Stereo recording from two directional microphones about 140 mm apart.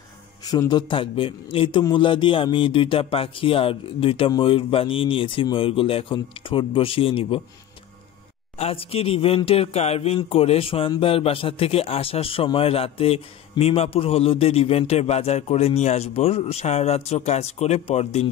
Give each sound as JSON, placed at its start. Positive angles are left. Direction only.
{"t": 0.5, "sound": "a man's voice", "side_deg": 30}
{"t": 8.5, "sound": "a man's voice", "side_deg": 45}